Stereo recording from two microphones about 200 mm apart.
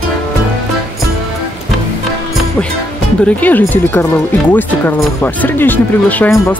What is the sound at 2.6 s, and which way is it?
Speech, 5° left (ahead or behind).